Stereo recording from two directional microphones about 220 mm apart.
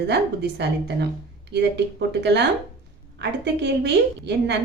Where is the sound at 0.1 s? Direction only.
50° right (ahead or behind).